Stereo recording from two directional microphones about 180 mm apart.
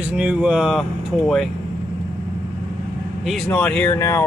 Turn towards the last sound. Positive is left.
turn(degrees=15)  # may be behind; listen again after turning